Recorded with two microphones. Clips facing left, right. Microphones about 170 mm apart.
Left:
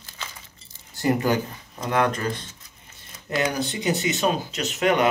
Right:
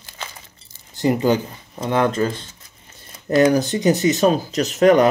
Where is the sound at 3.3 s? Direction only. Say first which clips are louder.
Right 10 dB; 40° right (ahead or behind).